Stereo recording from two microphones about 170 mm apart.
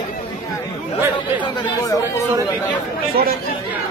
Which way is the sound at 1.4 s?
25° left (ahead or behind).